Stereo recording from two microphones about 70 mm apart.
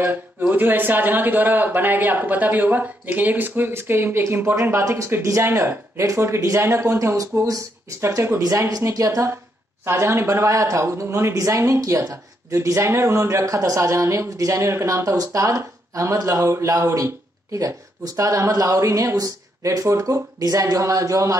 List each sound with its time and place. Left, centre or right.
0.0 s speech: right
8.4 s speech: right
10.2 s speech: right
16.7 s speech: right